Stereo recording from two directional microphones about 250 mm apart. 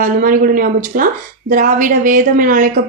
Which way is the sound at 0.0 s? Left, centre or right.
Right.